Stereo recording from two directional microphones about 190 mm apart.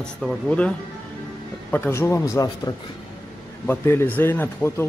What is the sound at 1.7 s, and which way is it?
Speech, 10° left (ahead or behind).